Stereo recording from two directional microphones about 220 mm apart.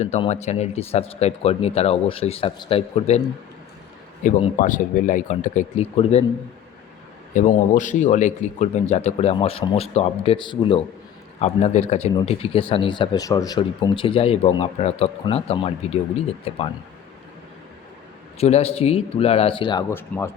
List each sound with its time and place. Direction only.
0.0 s speech: 30° left (ahead or behind)
4.2 s speech: 35° left (ahead or behind)
7.3 s speech: 35° left (ahead or behind)
18.3 s speech: 30° left (ahead or behind); by 20.3 s 10° left (ahead or behind)